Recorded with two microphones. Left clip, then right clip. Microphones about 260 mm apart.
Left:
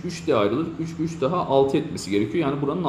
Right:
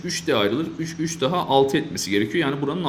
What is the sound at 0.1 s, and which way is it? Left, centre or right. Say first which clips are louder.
A man's voice: even; right.